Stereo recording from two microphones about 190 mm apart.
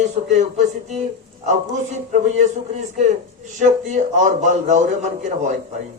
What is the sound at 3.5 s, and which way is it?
A man's voice, 40° right (ahead or behind).